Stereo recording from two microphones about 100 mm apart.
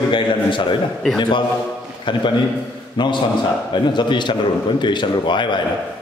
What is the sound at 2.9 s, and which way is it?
A man's voice, 50° left (ahead or behind).